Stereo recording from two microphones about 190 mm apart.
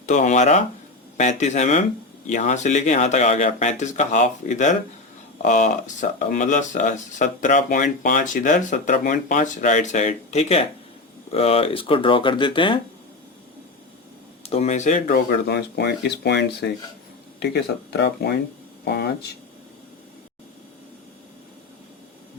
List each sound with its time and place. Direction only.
0.0 s speech: 40° left (ahead or behind)
14.4 s speech: 35° left (ahead or behind); by 18.3 s 60° left (ahead or behind)